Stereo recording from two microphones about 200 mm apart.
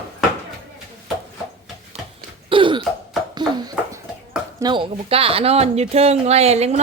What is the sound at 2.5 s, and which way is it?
Throat clearing, 25° right (ahead or behind).